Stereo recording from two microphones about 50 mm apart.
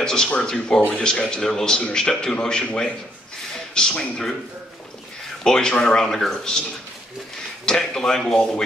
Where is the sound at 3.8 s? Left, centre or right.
Centre.